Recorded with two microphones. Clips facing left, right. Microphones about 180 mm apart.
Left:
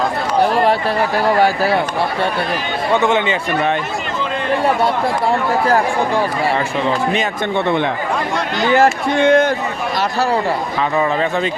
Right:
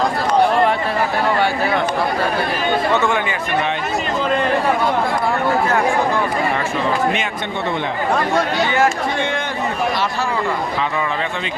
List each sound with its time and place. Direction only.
0.5 s chatter: 35° left (ahead or behind)
1.4 s speech: 35° left (ahead or behind)
2.9 s speech: 20° left (ahead or behind)
8.7 s speech: 40° left (ahead or behind)